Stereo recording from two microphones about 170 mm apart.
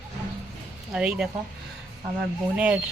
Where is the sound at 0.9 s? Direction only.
5° right (ahead or behind).